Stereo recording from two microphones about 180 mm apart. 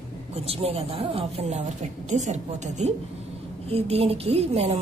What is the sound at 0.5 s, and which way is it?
A woman's voice, 35° right (ahead or behind).